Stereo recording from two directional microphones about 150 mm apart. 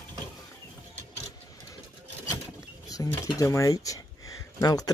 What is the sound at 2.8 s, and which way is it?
Speech, 25° left (ahead or behind).